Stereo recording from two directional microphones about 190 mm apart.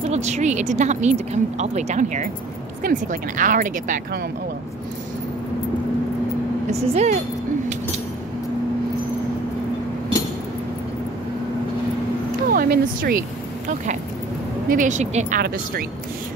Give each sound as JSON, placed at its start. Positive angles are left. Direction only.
{"t": 0.0, "sound": "speech", "side_deg": -35}
{"t": 6.7, "sound": "speech", "side_deg": -35}
{"t": 12.5, "sound": "speech", "side_deg": -55}
{"t": 14.7, "sound": "speech", "side_deg": -40}
{"t": 15.4, "sound": "speech", "side_deg": -50}